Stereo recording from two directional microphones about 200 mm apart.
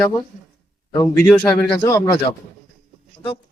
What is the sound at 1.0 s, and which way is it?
Speech, 10° left (ahead or behind).